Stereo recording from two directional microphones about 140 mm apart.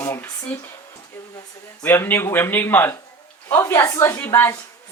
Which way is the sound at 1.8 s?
15° left (ahead or behind).